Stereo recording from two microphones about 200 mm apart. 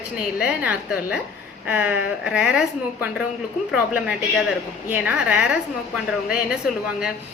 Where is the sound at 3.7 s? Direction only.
5° right (ahead or behind).